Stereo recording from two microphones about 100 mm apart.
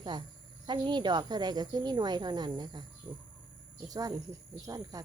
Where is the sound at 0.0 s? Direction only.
50° right (ahead or behind).